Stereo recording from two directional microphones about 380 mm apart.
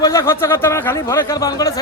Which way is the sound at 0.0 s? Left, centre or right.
Centre.